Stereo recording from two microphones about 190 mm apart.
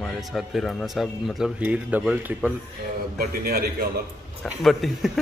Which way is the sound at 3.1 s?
55° right (ahead or behind).